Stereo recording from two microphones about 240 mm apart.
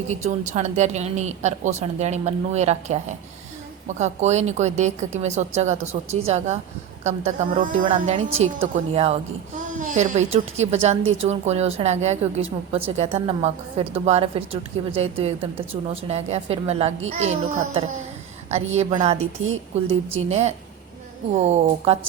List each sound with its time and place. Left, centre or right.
0.1 s a woman's voice: right
21.3 s a woman's voice: right